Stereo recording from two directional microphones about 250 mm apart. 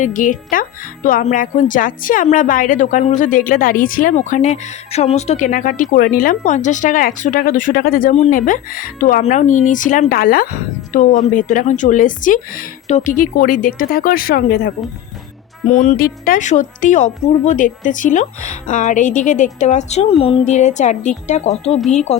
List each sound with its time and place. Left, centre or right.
0.0 s speech: left
16.0 s a woman's voice: left